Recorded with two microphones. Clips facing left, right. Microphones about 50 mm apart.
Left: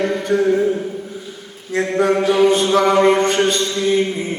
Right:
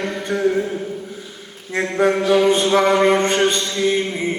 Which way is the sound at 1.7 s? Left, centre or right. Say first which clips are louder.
Left 1 dB; right.